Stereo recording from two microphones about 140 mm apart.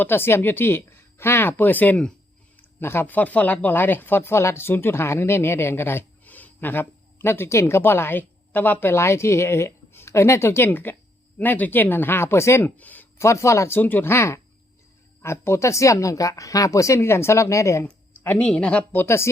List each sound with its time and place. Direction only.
0.0 s speech: 15° left (ahead or behind)
17.8 s speech: 10° left (ahead or behind)